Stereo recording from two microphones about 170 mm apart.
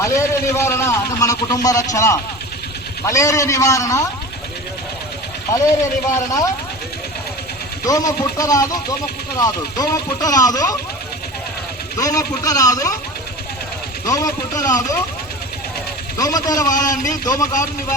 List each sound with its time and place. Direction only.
0.0 s a man's voice: 15° left (ahead or behind)
5.8 s a man's voice: 20° left (ahead or behind)
7.9 s a man's voice: 20° left (ahead or behind)
11.9 s a man's voice: 20° left (ahead or behind)
14.1 s a man's voice: 20° left (ahead or behind)
16.1 s a man's voice: 20° left (ahead or behind)